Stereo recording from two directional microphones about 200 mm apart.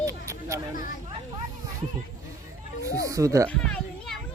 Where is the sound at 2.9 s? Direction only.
15° right (ahead or behind).